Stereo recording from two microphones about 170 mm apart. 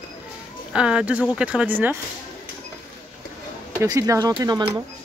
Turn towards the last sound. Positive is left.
turn(degrees=-25)  # may be behind; listen again after turning